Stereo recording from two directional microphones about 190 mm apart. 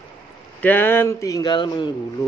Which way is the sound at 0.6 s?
10° left (ahead or behind).